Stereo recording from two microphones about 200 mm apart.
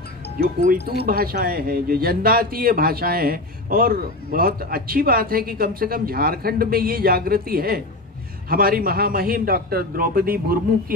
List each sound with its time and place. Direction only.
1.0 s speech: 50° right (ahead or behind)